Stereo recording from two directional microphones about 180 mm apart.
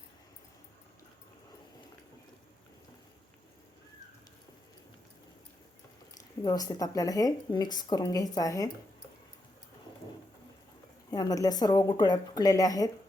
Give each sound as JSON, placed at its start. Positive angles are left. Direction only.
{"t": 6.1, "sound": "speech", "side_deg": 20}
{"t": 11.1, "sound": "speech", "side_deg": 20}